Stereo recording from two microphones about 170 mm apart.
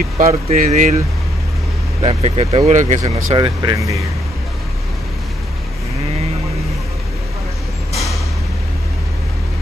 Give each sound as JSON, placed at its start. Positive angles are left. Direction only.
{"t": 0.3, "sound": "speech", "side_deg": -40}
{"t": 2.0, "sound": "speech", "side_deg": -35}
{"t": 3.0, "sound": "speech", "side_deg": -25}